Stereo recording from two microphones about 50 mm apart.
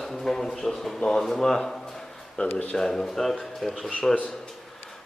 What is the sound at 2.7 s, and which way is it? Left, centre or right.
Speech, centre.